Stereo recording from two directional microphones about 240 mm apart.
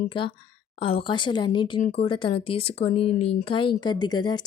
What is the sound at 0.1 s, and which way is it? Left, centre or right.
A woman's voice, left.